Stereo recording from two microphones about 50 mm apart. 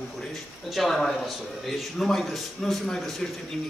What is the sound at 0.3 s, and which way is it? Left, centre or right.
A man's voice, centre.